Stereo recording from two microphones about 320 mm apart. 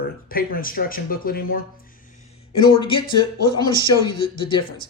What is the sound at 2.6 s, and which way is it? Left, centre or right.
Speech, centre.